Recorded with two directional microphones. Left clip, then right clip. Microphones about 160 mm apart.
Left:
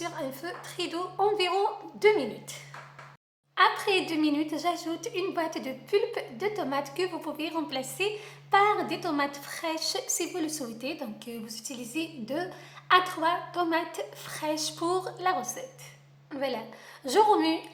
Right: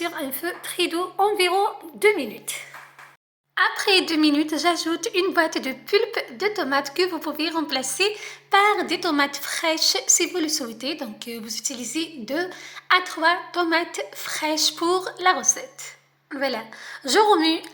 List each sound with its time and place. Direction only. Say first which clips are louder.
0.0 s a woman's voice: right 7 dB; 25° right (ahead or behind)
3.5 s a woman's voice: right 4 dB; 20° right (ahead or behind)